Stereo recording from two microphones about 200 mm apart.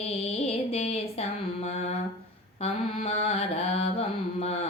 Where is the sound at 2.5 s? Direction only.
30° left (ahead or behind).